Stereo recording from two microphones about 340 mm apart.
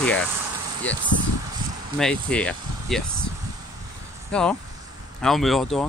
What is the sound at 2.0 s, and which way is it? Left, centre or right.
Speech, centre.